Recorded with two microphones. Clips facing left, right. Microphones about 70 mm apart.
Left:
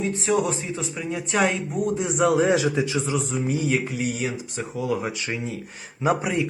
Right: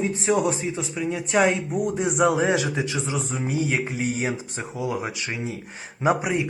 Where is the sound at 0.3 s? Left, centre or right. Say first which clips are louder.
Right 1 dB; centre.